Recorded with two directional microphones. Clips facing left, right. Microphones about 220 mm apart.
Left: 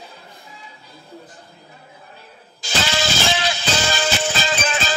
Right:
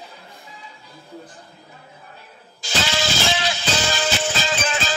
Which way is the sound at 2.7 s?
50° left (ahead or behind).